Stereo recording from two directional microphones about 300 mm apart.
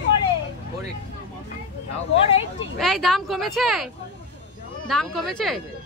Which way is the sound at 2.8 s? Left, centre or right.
Centre.